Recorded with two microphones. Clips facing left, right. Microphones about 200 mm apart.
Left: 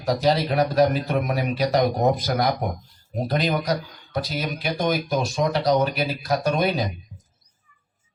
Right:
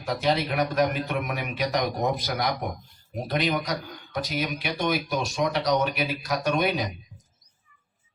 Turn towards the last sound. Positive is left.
turn(degrees=35)  # may be behind; listen again after turning